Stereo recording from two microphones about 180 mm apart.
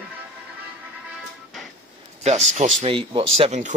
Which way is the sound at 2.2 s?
40° right (ahead or behind).